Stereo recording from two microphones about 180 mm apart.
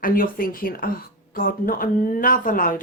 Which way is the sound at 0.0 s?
50° left (ahead or behind).